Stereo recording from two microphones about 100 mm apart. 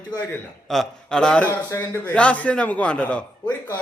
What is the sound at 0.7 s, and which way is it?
Speech, 5° left (ahead or behind).